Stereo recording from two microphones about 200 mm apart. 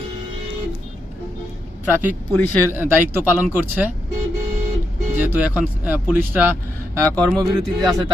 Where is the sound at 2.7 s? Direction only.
10° right (ahead or behind).